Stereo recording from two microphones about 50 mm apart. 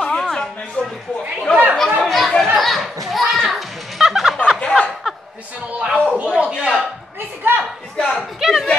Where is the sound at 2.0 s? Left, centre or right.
Centre.